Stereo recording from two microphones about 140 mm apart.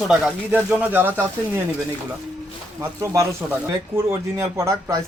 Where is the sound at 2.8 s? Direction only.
20° right (ahead or behind).